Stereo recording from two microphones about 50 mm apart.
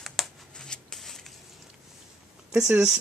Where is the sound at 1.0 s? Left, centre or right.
Centre.